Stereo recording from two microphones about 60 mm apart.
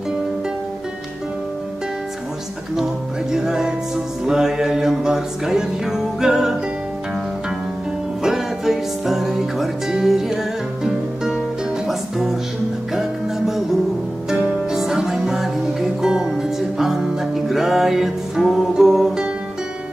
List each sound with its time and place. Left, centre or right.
2.7 s music: centre
8.2 s music: centre
14.3 s music: centre
14.7 s music: centre